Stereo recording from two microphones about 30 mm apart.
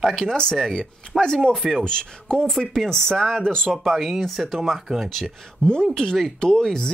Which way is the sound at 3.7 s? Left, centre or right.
Centre.